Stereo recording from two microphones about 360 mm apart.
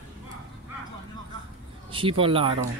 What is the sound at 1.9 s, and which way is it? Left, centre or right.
Speech, centre.